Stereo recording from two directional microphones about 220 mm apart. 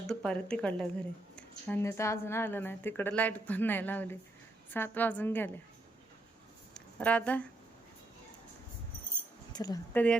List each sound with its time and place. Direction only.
0.1 s a woman's voice: 5° left (ahead or behind)
6.7 s a sound: 5° left (ahead or behind)
9.5 s a woman's voice: 15° left (ahead or behind)